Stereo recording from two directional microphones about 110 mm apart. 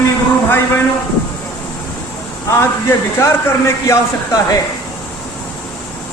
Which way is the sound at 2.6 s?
25° left (ahead or behind).